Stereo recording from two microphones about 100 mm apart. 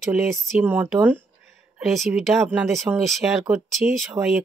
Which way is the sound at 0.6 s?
15° right (ahead or behind).